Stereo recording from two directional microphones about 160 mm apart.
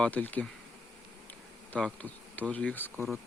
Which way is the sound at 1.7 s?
5° left (ahead or behind).